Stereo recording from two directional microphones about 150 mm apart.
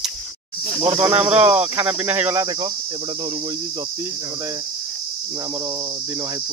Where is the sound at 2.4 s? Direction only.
25° right (ahead or behind).